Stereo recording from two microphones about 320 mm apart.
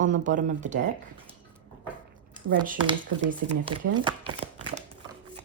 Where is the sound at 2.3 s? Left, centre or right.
Right.